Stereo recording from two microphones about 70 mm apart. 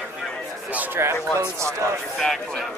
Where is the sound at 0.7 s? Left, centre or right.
Right.